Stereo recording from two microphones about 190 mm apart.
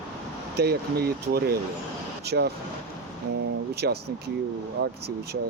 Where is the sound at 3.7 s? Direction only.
55° right (ahead or behind).